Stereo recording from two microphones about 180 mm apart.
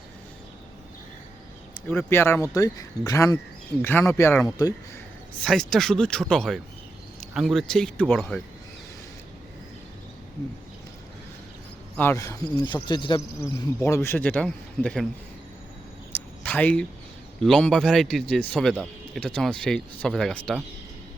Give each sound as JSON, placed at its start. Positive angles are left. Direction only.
{"t": 1.9, "sound": "speech", "side_deg": 15}
{"t": 5.4, "sound": "a man's voice", "side_deg": 0}
{"t": 11.9, "sound": "speech", "side_deg": 15}
{"t": 13.4, "sound": "speech", "side_deg": 15}
{"t": 16.1, "sound": "a sound", "side_deg": 10}
{"t": 17.4, "sound": "a man's voice", "side_deg": 0}